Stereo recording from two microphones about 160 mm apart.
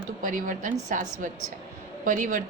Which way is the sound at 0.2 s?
55° right (ahead or behind).